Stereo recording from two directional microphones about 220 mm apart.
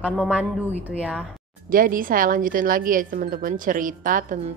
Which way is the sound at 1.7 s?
40° right (ahead or behind).